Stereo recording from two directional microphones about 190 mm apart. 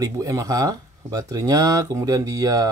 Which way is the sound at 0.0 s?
20° right (ahead or behind).